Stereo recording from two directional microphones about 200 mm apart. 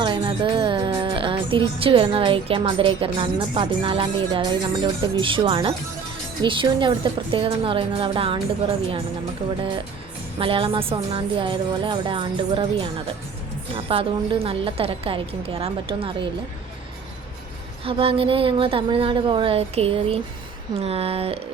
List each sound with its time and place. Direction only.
0.0 s music: 25° right (ahead or behind)
10.3 s music: 25° right (ahead or behind)
17.8 s music: 25° right (ahead or behind)